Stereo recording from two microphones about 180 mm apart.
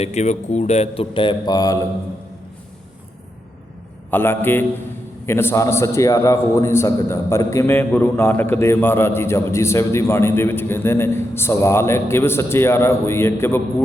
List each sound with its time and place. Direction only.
0.0 s a man's voice: 40° left (ahead or behind); by 1.8 s 20° left (ahead or behind)
4.1 s a man's voice: 10° left (ahead or behind)